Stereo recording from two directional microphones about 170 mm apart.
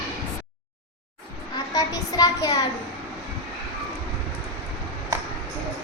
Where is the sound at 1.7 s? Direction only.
20° left (ahead or behind).